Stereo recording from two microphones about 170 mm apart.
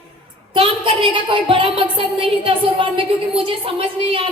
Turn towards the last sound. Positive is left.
turn(degrees=-30)  # may be behind; listen again after turning